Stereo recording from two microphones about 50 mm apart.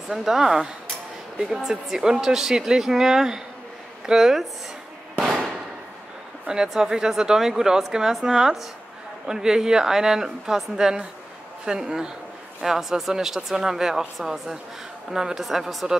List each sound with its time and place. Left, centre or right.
0.1 s speech: centre
6.4 s speech: centre